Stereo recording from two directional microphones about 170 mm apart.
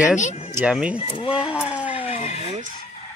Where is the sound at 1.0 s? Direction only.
30° left (ahead or behind).